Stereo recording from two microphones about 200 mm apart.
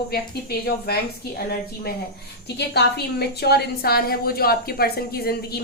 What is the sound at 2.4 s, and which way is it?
A woman's voice, 55° left (ahead or behind).